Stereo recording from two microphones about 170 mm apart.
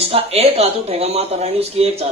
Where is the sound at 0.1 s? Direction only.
35° right (ahead or behind).